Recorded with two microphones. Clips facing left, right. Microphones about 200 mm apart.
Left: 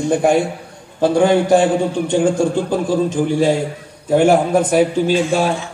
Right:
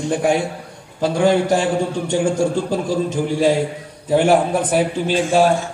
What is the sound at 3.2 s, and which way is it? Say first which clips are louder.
A man's voice: left 1 dB; 50° left (ahead or behind).